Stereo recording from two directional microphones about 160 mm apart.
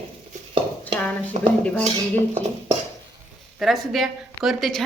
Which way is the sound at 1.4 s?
50° right (ahead or behind).